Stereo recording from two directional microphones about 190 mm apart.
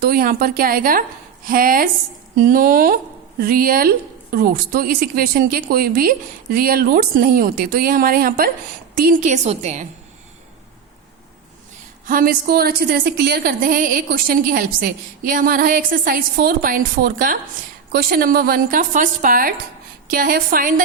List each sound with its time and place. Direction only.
0.0 s a woman's voice: 50° right (ahead or behind); by 9.8 s 35° right (ahead or behind)
12.0 s speech: 50° right (ahead or behind)